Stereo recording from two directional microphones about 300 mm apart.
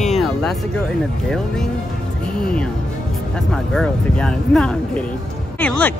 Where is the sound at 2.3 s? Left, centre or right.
Centre.